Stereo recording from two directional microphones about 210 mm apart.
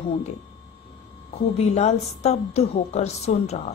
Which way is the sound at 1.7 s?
30° left (ahead or behind).